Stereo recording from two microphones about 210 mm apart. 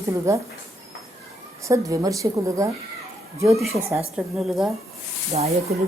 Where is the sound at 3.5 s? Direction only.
Centre (ahead or behind).